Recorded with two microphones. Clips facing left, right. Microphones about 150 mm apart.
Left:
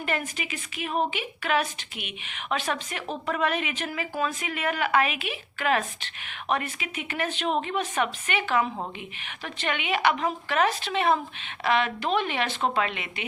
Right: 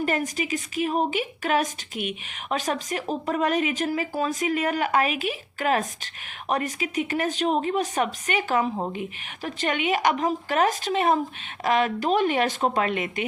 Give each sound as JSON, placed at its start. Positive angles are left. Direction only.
{"t": 0.0, "sound": "a woman's voice", "side_deg": -40}